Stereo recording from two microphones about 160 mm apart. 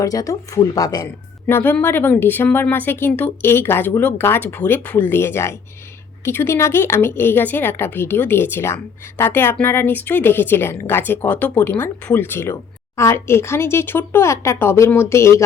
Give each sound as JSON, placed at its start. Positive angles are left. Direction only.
{"t": 0.0, "sound": "speech", "side_deg": 20}
{"t": 1.5, "sound": "a woman's voice", "side_deg": 15}